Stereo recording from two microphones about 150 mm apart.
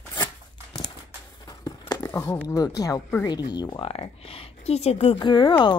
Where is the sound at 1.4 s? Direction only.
25° left (ahead or behind).